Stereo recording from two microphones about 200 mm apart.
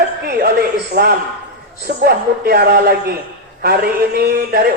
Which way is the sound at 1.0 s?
50° right (ahead or behind).